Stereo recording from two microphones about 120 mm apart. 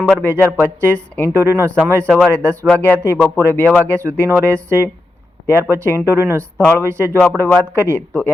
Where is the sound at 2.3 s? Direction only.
10° left (ahead or behind).